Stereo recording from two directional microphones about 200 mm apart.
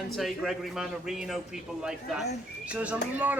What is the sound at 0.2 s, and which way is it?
A man's voice, centre (ahead or behind).